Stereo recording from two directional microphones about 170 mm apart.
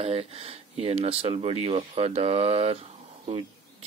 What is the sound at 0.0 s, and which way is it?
Speech, 35° right (ahead or behind).